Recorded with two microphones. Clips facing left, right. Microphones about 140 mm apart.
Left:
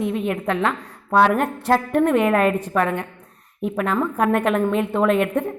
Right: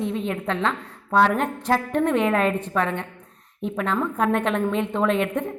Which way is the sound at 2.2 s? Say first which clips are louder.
Left 3 dB; 60° left (ahead or behind).